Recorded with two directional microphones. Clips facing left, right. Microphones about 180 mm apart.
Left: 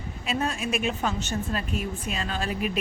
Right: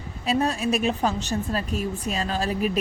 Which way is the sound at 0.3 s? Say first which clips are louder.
Right 5 dB; 35° right (ahead or behind).